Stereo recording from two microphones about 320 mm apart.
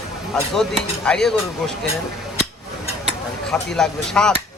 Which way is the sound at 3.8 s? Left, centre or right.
Centre.